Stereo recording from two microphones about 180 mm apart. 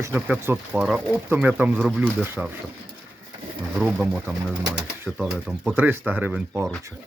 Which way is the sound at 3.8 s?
5° right (ahead or behind).